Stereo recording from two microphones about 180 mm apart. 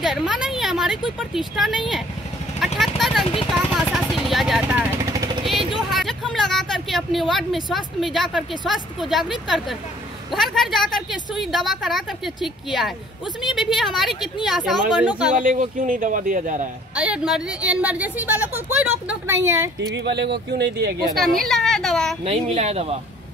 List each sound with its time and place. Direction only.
0.0 s speech: centre (ahead or behind)
2.6 s vehicle: centre (ahead or behind)
5.9 s a sound: centre (ahead or behind)
6.3 s a woman's voice: centre (ahead or behind)
13.6 s a woman's voice: centre (ahead or behind)
15.3 s a man's voice: 45° right (ahead or behind)
16.9 s speech: 5° right (ahead or behind)
20.0 s speech: 70° right (ahead or behind)
21.4 s a woman's voice: centre (ahead or behind)
22.2 s speech: 35° right (ahead or behind)